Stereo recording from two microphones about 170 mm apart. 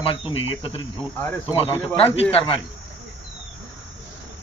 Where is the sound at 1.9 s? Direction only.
35° left (ahead or behind).